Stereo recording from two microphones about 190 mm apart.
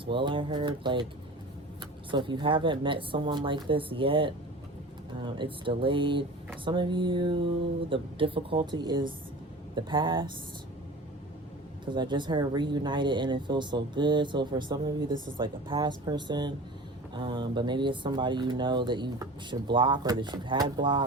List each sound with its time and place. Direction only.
0.0 s speech: 25° right (ahead or behind)
11.9 s speech: 25° right (ahead or behind)